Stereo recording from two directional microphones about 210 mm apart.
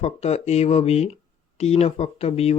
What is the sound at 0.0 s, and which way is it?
Speech, 30° left (ahead or behind).